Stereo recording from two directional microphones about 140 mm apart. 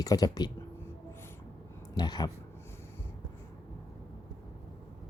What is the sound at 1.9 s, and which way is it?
Speech, 30° left (ahead or behind).